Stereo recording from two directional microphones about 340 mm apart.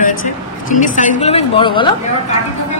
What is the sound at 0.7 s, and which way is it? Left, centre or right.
A woman's voice, left.